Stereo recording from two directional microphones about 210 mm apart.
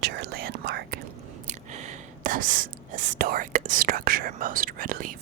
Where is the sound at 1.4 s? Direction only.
35° right (ahead or behind).